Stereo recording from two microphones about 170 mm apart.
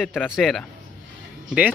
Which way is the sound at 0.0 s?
Centre (ahead or behind).